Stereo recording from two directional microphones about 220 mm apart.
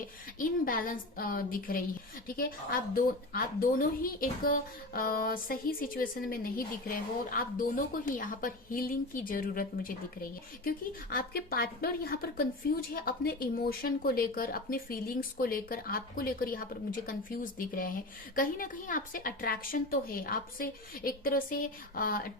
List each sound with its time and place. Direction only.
0.3 s a woman's voice: 40° left (ahead or behind)